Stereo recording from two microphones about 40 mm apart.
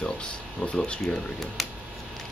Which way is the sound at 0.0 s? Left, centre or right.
Left.